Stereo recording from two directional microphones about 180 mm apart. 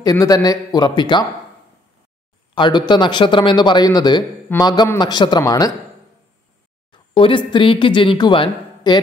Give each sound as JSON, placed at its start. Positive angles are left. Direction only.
{"t": 0.0, "sound": "speech", "side_deg": 20}
{"t": 2.5, "sound": "speech", "side_deg": 25}
{"t": 6.9, "sound": "speech", "side_deg": 30}